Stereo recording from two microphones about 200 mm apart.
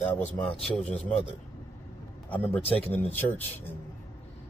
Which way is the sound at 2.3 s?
10° left (ahead or behind).